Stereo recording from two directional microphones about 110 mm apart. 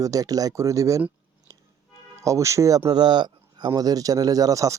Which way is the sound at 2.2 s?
25° right (ahead or behind).